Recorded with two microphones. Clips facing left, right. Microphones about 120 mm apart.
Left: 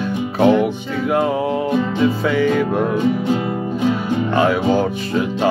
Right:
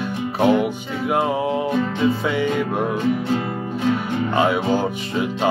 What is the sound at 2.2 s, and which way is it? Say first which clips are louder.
Music: left 4 dB; 20° right (ahead or behind).